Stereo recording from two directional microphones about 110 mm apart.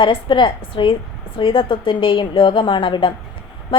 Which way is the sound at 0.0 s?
50° left (ahead or behind).